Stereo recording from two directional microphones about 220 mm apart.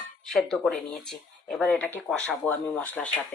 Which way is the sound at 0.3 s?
Centre (ahead or behind).